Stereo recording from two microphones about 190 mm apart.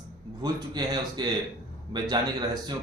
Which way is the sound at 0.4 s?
20° right (ahead or behind).